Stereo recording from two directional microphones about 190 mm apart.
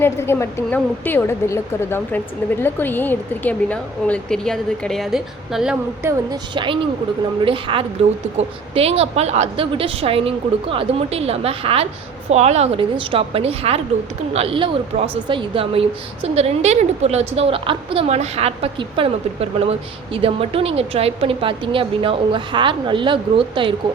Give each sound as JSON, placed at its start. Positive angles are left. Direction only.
{"t": 0.0, "sound": "a woman's voice", "side_deg": 15}
{"t": 6.0, "sound": "a woman's voice", "side_deg": -15}
{"t": 6.5, "sound": "a woman's voice", "side_deg": -25}